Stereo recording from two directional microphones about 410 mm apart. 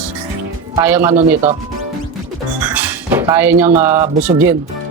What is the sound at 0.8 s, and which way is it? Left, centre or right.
Speech, centre.